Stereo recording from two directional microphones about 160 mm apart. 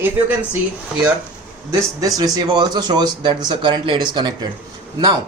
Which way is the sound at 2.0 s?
20° right (ahead or behind).